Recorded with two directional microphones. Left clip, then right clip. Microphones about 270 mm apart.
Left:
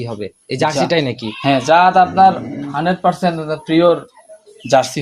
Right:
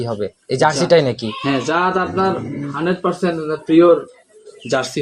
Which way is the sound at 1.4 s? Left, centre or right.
Left.